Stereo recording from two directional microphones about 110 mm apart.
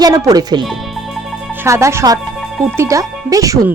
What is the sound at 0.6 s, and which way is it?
Music, centre (ahead or behind).